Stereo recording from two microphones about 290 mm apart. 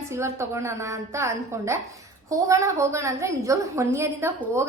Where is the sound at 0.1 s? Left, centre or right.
Centre.